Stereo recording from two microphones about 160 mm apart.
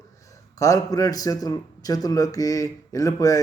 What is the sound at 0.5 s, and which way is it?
A man's voice, 20° left (ahead or behind).